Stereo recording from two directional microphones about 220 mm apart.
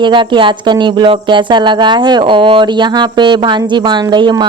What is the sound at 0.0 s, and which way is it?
Speech, 20° right (ahead or behind).